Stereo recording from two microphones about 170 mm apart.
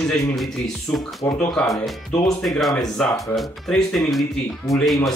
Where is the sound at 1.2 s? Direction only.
15° left (ahead or behind).